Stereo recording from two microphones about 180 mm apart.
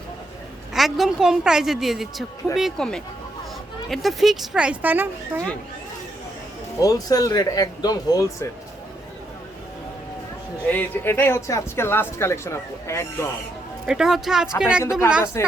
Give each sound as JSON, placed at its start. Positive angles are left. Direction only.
{"t": 0.7, "sound": "speech", "side_deg": 0}
{"t": 6.7, "sound": "speech", "side_deg": 20}
{"t": 10.7, "sound": "speech", "side_deg": 10}
{"t": 13.8, "sound": "speech", "side_deg": -5}
{"t": 15.2, "sound": "speech", "side_deg": 15}